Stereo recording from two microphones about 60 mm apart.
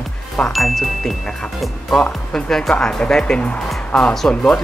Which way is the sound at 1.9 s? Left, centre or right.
Centre.